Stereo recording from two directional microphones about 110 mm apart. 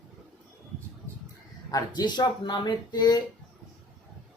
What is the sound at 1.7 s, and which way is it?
Speech, 35° left (ahead or behind).